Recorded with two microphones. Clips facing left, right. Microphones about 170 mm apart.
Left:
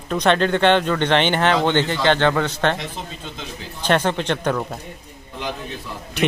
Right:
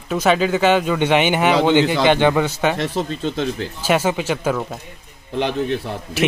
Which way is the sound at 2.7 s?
70° right (ahead or behind).